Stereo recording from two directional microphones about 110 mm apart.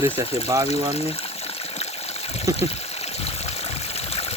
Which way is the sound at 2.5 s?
70° left (ahead or behind).